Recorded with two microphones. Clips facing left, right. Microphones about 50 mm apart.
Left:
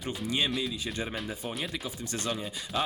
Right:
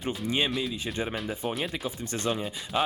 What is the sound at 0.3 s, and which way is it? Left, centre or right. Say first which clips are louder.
Speech: right 2 dB; right.